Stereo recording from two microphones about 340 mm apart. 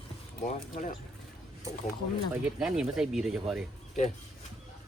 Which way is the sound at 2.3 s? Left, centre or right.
Centre.